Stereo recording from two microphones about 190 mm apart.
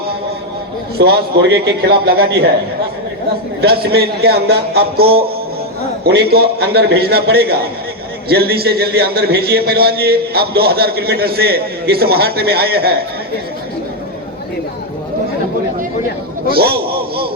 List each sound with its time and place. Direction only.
0.9 s a man's voice: 60° right (ahead or behind)
3.6 s a man's voice: 55° right (ahead or behind)
16.5 s speech: 55° right (ahead or behind)